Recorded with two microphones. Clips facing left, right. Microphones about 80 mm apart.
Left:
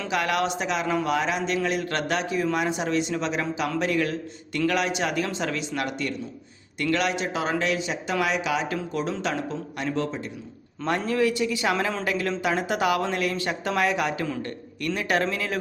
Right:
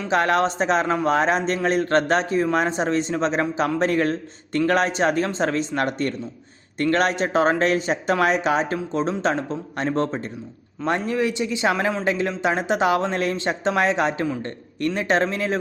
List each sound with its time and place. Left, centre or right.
0.1 s a man's voice: right
10.8 s speech: right